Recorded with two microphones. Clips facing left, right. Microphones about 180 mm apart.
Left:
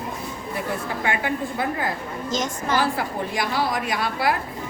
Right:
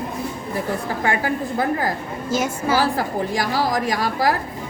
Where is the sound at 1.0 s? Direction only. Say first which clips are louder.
Right 3 dB; 40° right (ahead or behind).